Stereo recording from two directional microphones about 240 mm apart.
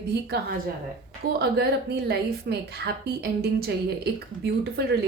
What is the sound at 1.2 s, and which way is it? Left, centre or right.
Speech, right.